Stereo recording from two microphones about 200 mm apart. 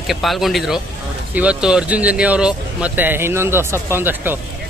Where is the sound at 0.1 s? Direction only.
Centre (ahead or behind).